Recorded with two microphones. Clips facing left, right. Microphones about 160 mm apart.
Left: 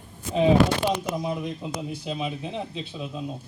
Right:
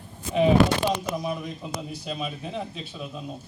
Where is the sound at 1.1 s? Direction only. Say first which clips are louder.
Left 1 dB; 20° left (ahead or behind).